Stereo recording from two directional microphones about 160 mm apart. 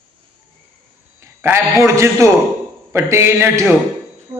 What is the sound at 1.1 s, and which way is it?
A man's voice, 15° right (ahead or behind).